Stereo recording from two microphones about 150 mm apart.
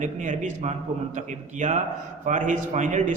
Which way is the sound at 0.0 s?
50° right (ahead or behind).